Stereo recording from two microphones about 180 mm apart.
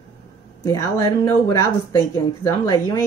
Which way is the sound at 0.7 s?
20° left (ahead or behind).